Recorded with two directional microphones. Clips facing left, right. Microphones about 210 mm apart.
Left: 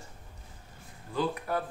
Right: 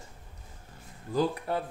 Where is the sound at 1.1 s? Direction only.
40° right (ahead or behind).